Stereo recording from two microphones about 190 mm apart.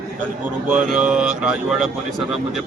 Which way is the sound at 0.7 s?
5° right (ahead or behind).